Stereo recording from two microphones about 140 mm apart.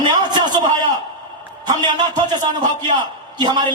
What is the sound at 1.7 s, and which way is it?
A man's voice, 30° right (ahead or behind).